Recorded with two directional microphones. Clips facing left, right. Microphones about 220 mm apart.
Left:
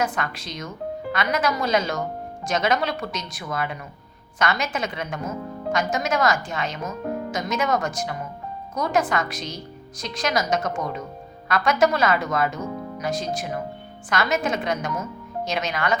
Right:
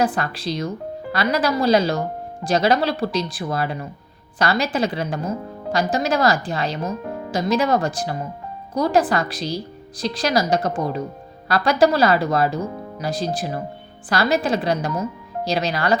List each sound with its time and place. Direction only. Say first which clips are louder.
0.0 s speech: right 5 dB; 35° right (ahead or behind)